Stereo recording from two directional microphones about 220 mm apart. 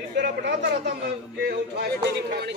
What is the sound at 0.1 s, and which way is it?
A man's voice, 50° right (ahead or behind).